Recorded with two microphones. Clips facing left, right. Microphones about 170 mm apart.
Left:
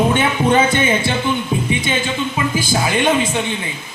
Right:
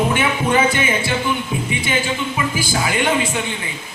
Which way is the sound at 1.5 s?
30° left (ahead or behind).